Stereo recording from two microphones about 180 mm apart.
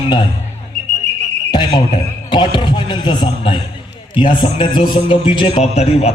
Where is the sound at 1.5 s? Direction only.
25° left (ahead or behind).